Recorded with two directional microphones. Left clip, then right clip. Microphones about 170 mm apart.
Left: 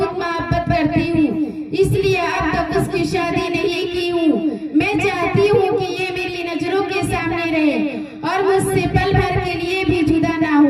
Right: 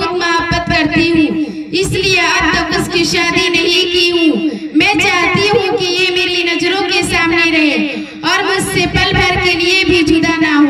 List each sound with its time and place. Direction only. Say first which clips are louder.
0.7 s music: right 7 dB; 50° left (ahead or behind)
2.3 s music: right 6 dB; 50° left (ahead or behind)
4.8 s a sound: right 8 dB; 45° left (ahead or behind)